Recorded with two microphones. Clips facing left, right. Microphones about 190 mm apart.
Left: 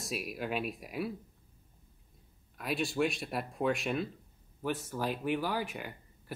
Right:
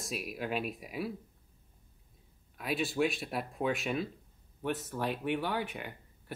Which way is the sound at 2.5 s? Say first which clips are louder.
Even; centre (ahead or behind).